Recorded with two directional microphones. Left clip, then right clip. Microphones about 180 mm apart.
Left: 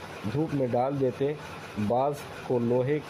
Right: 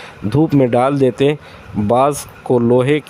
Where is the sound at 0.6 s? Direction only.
50° right (ahead or behind).